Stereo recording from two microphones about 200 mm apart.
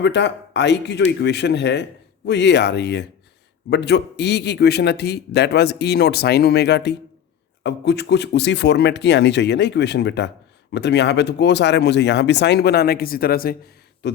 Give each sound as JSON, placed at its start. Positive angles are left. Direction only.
{"t": 0.0, "sound": "speech", "side_deg": 60}
{"t": 14.0, "sound": "speech", "side_deg": 60}